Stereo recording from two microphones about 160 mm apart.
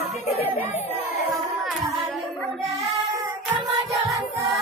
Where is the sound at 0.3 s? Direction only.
40° left (ahead or behind).